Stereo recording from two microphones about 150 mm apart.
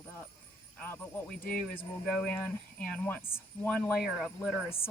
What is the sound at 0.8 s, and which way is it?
Speech, 10° left (ahead or behind).